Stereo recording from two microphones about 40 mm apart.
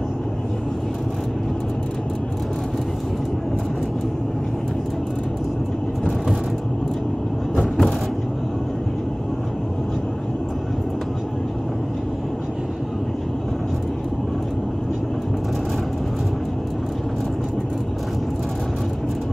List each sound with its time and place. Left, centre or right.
7.5 s vehicle: centre